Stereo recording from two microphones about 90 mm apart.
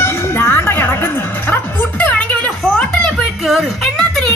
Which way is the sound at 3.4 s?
Centre (ahead or behind).